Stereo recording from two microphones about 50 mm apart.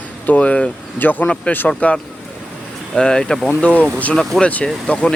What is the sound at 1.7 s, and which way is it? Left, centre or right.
Speech, left.